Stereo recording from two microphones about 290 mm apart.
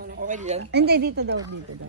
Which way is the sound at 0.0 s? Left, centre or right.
Right.